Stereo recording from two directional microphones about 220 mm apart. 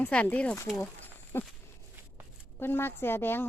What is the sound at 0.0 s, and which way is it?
Speech, 5° left (ahead or behind).